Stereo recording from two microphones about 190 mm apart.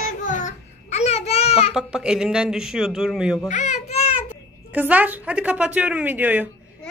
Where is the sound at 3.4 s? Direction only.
40° left (ahead or behind).